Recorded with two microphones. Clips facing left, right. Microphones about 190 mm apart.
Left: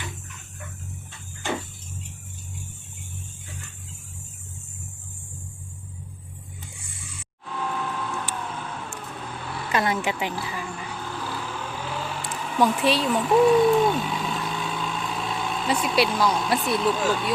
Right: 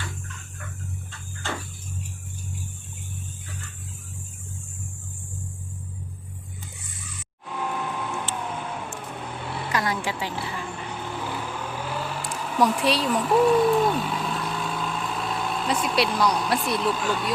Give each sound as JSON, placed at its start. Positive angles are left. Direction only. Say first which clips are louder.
{"t": 0.0, "sound": "a sound", "louder": "right 1 dB", "side_deg": 20}
{"t": 1.4, "sound": "a sound", "louder": "left 4 dB", "side_deg": 15}
{"t": 7.4, "sound": "vehicle", "louder": "even", "side_deg": -15}
{"t": 9.7, "sound": "vehicle", "louder": "left 3 dB", "side_deg": 25}
{"t": 11.0, "sound": "vehicle", "louder": "right 2 dB", "side_deg": -20}
{"t": 17.1, "sound": "speech", "louder": "left 2 dB", "side_deg": 0}